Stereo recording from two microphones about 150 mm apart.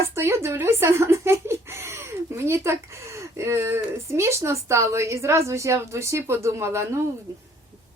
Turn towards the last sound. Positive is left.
turn(degrees=-20)  # may be behind; listen again after turning